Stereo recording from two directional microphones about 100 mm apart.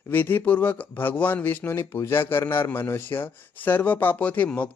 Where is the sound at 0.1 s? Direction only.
20° left (ahead or behind).